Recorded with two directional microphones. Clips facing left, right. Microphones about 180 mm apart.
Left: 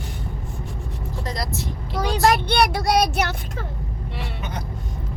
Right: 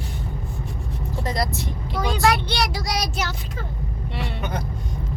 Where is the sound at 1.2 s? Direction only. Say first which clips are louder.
Right 3 dB; centre (ahead or behind).